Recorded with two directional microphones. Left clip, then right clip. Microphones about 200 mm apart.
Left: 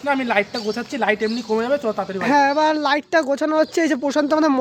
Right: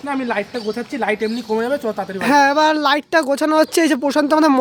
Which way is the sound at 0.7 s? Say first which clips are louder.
Even; 10° left (ahead or behind).